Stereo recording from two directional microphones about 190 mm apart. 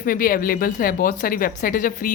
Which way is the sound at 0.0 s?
50° left (ahead or behind).